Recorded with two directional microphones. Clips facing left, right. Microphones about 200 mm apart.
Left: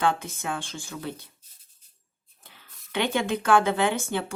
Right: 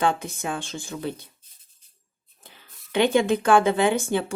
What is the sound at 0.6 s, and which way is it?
Speech, 20° right (ahead or behind).